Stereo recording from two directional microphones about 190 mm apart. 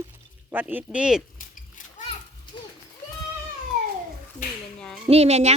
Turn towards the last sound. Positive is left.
turn(degrees=-35)  # may be behind; listen again after turning